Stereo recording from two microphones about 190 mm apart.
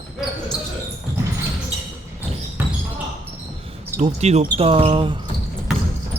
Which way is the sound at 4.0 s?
35° right (ahead or behind).